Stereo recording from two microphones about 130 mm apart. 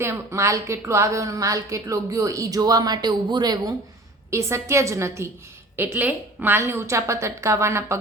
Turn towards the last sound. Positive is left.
turn(degrees=-20)  # may be behind; listen again after turning